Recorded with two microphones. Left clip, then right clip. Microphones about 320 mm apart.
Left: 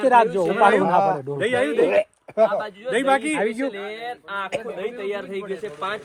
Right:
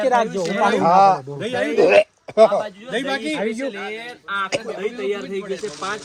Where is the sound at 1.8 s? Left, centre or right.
Right.